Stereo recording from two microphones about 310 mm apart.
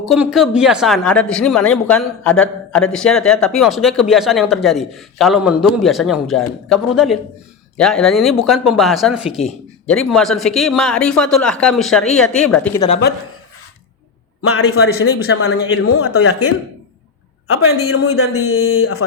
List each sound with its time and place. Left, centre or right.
0.1 s a woman's voice: centre
14.4 s a man's voice: left
14.8 s speech: left
15.4 s a man's voice: left
17.5 s a man's voice: left